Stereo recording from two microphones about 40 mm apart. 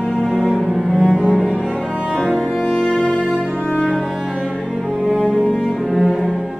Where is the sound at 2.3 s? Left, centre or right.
Centre.